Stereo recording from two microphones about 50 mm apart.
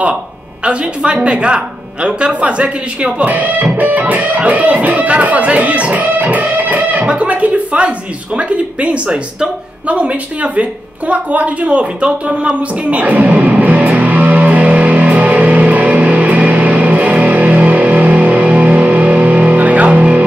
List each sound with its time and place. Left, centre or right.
1.2 s speech: right
15.7 s music: right